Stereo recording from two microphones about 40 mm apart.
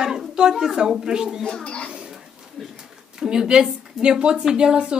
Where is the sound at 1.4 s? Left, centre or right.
Left.